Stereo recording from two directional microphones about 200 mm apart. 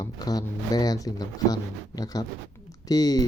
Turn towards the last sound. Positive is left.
turn(degrees=20)  # may be behind; listen again after turning